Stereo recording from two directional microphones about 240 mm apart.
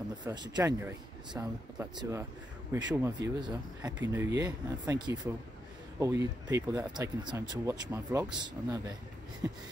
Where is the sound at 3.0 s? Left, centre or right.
Centre.